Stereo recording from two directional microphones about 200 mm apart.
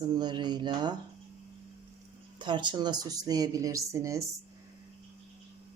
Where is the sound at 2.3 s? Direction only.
25° right (ahead or behind).